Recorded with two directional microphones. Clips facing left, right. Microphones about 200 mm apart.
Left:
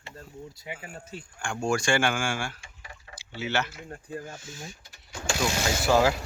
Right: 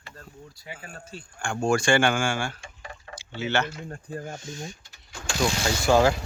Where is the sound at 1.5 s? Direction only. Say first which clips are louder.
Right 3 dB; 55° right (ahead or behind).